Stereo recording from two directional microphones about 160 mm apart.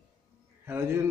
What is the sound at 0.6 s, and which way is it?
Speech, 15° right (ahead or behind).